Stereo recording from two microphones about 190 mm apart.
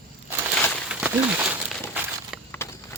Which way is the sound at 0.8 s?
5° right (ahead or behind).